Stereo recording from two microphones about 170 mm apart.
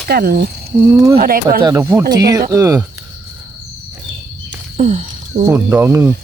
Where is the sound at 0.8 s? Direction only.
15° right (ahead or behind).